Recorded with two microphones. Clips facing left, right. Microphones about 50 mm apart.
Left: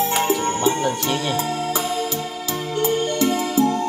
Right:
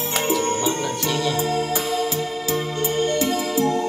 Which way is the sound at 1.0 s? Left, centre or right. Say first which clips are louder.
Even; left.